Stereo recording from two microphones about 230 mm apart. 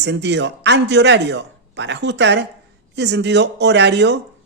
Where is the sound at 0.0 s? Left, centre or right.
Right.